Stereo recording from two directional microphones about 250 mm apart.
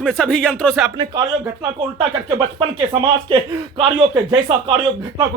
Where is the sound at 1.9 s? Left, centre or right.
Centre.